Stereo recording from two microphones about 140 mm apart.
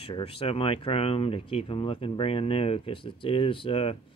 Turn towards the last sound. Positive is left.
turn(degrees=45)  # may be behind; listen again after turning